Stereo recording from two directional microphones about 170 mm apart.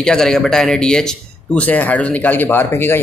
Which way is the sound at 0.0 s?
5° left (ahead or behind).